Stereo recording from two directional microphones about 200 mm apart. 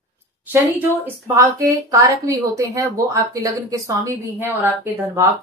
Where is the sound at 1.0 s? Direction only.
15° right (ahead or behind).